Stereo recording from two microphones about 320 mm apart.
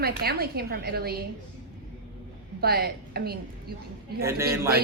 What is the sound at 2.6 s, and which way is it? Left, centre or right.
A woman's voice, right.